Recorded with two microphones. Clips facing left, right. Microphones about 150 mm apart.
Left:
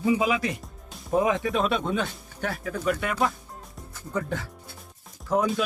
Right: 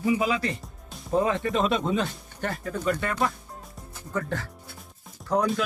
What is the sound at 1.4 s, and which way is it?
Speech, centre (ahead or behind).